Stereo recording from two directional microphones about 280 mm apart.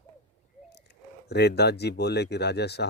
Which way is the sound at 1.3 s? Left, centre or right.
Left.